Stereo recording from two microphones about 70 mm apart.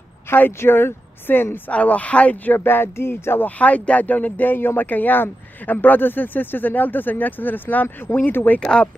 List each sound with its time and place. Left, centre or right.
0.3 s speech: left
3.4 s speech: left
8.5 s speech: centre